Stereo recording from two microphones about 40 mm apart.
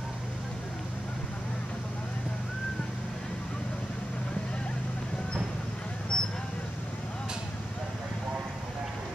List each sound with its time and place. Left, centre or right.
6.1 s vehicle: left